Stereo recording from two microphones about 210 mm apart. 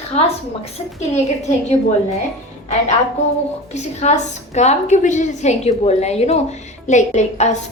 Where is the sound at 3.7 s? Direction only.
35° left (ahead or behind).